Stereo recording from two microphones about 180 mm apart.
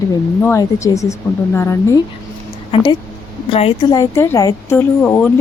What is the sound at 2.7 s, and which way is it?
A woman's voice, 30° left (ahead or behind).